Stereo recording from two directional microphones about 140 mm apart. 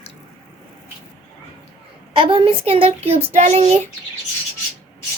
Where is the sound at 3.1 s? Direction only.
55° right (ahead or behind).